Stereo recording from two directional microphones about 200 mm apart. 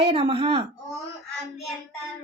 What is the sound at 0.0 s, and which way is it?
Speech, 30° right (ahead or behind).